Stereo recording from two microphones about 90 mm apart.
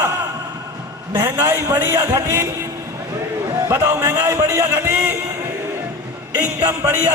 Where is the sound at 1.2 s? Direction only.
25° right (ahead or behind).